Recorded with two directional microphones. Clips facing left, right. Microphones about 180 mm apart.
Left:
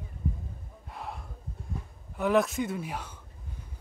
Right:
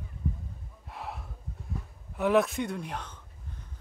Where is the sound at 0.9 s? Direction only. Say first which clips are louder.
Even; centre (ahead or behind).